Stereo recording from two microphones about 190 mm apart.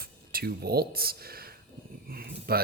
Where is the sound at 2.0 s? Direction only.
50° right (ahead or behind).